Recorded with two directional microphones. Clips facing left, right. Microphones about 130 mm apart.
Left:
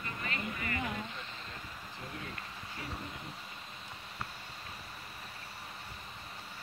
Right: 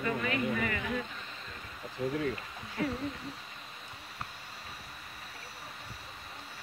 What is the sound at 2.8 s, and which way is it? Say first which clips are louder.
Speech: right 12 dB; 65° right (ahead or behind).